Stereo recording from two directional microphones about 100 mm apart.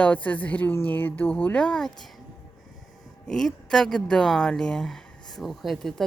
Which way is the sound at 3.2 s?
5° left (ahead or behind).